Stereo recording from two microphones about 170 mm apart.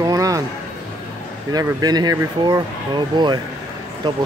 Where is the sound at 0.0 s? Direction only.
20° right (ahead or behind).